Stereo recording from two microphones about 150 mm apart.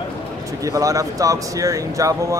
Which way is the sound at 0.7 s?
20° right (ahead or behind).